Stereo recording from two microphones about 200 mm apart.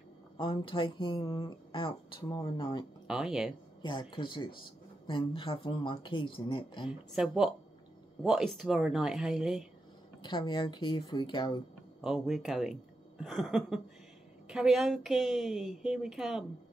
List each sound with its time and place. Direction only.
0.4 s speech: 25° left (ahead or behind)
3.1 s a woman's voice: centre (ahead or behind)
3.8 s speech: 25° left (ahead or behind)
6.9 s a woman's voice: centre (ahead or behind)
10.2 s speech: 20° left (ahead or behind)
12.0 s a woman's voice: centre (ahead or behind)